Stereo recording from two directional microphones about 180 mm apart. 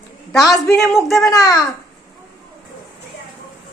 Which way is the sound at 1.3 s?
20° left (ahead or behind).